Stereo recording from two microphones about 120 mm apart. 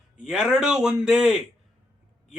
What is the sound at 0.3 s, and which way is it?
A man's voice, 5° right (ahead or behind).